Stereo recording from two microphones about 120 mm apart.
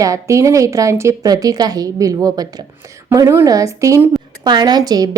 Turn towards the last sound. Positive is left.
turn(degrees=-35)  # may be behind; listen again after turning